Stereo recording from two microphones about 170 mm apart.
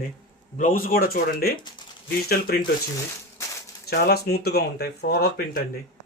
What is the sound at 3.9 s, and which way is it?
Speech, 70° left (ahead or behind).